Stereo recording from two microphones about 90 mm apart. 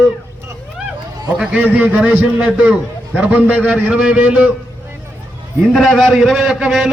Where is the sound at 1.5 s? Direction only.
15° right (ahead or behind).